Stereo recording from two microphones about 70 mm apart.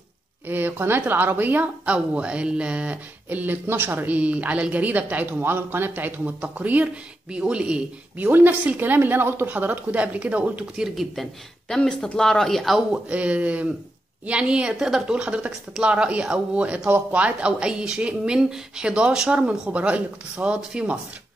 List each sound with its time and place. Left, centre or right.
0.5 s a woman's voice: right
8.3 s a woman's voice: right
10.8 s speech: centre
12.9 s a woman's voice: centre